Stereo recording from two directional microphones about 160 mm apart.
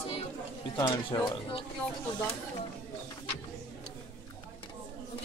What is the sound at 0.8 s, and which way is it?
Speech, 30° left (ahead or behind).